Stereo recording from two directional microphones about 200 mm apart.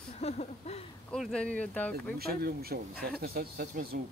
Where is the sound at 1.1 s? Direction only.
5° left (ahead or behind).